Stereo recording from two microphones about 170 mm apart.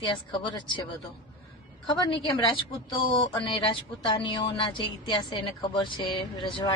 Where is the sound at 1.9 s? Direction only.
25° left (ahead or behind).